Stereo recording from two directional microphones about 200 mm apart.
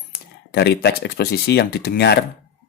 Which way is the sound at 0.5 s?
55° left (ahead or behind).